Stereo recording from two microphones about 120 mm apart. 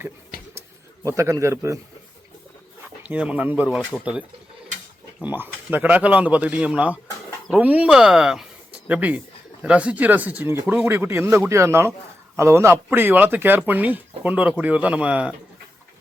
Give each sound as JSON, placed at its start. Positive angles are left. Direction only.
{"t": 1.0, "sound": "a man's voice", "side_deg": -25}
{"t": 3.0, "sound": "a man's voice", "side_deg": -10}